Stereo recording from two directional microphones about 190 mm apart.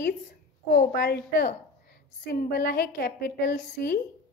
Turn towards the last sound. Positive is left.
turn(degrees=55)  # may be behind; listen again after turning